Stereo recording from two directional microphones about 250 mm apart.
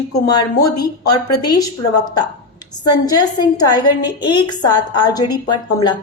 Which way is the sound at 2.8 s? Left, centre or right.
Centre.